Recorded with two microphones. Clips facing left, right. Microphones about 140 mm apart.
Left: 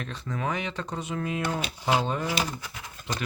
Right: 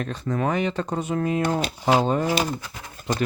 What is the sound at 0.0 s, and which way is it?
Speech, 45° right (ahead or behind).